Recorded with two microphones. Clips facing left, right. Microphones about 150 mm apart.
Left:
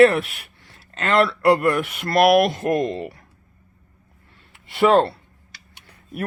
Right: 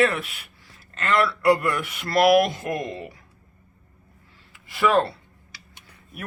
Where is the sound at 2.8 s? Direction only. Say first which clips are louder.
Left 7 dB; 60° left (ahead or behind).